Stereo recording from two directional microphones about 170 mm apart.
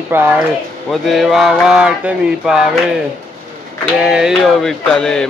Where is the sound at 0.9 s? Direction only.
Centre (ahead or behind).